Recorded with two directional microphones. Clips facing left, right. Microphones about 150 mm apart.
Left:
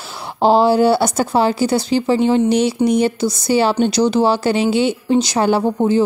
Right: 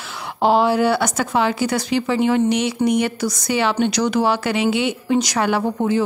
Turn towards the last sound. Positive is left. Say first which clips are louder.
# left 4 dB
turn(degrees=30)  # may be behind; listen again after turning